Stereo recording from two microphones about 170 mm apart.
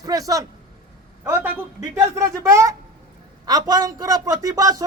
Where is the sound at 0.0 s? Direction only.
20° right (ahead or behind).